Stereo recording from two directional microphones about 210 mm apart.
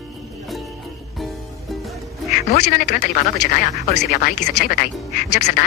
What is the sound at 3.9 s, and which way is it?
Speech, 45° left (ahead or behind).